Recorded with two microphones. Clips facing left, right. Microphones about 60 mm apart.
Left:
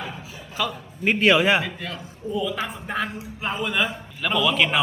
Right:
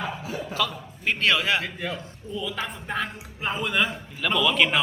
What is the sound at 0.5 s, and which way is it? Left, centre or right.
A man's voice, centre.